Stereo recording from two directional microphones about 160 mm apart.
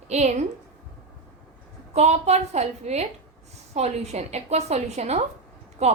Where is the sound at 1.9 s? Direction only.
40° right (ahead or behind).